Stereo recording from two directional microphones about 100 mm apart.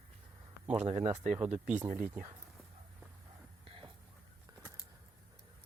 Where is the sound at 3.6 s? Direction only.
65° right (ahead or behind).